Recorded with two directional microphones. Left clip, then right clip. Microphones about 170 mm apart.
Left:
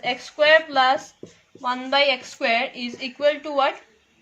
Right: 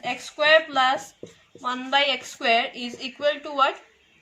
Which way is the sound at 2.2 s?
40° left (ahead or behind).